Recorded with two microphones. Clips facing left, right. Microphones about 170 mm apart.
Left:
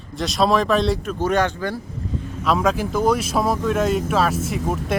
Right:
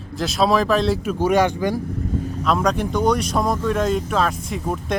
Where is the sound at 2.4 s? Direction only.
Centre (ahead or behind).